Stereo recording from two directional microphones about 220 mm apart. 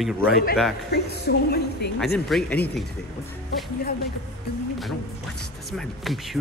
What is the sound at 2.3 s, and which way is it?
Speech, 5° left (ahead or behind).